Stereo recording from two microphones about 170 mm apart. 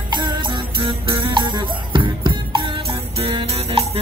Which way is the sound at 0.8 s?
30° right (ahead or behind).